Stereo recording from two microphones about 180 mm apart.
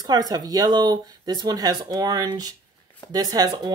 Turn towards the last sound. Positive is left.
turn(degrees=-20)  # may be behind; listen again after turning